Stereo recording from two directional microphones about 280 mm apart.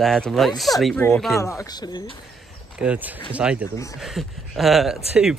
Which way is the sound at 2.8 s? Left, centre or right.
Centre.